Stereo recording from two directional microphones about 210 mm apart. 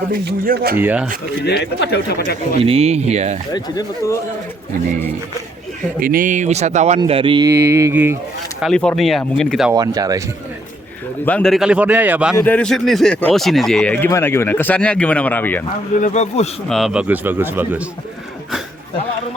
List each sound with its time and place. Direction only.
0.1 s speech: 45° right (ahead or behind)
0.8 s speech: 10° right (ahead or behind)
1.0 s a man's voice: 40° right (ahead or behind)
1.5 s speech: 50° left (ahead or behind)
2.6 s a man's voice: 30° right (ahead or behind)
3.5 s speech: 15° left (ahead or behind)
6.0 s a man's voice: 40° right (ahead or behind); by 8.2 s 10° right (ahead or behind)
8.6 s speech: 5° left (ahead or behind)
9.7 s speech: 20° right (ahead or behind)
11.3 s speech: 5° left (ahead or behind)
12.4 s speech: 5° left (ahead or behind)
16.0 s speech: 35° left (ahead or behind)
16.6 s speech: centre (ahead or behind)